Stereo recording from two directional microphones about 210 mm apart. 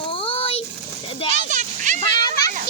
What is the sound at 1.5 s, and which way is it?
Children playing, 35° right (ahead or behind).